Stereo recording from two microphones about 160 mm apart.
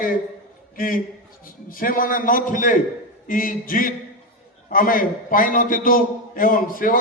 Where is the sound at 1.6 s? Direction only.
60° left (ahead or behind).